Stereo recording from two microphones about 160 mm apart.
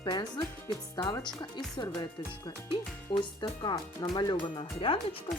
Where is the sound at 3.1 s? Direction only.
30° left (ahead or behind).